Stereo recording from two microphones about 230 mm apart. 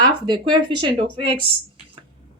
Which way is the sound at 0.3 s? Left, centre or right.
Centre.